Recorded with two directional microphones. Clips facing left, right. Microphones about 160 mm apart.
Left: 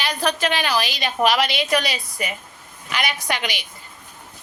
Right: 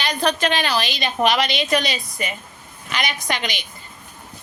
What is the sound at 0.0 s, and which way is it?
A woman's voice, 5° left (ahead or behind).